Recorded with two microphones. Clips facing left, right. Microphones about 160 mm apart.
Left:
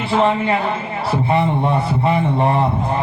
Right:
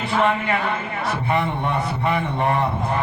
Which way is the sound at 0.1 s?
30° left (ahead or behind).